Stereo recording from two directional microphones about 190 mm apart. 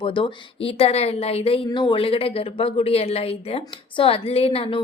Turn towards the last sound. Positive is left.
turn(degrees=30)  # may be behind; listen again after turning